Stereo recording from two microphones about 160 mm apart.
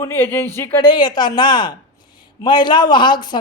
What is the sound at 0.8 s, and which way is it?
A man's voice, 25° left (ahead or behind).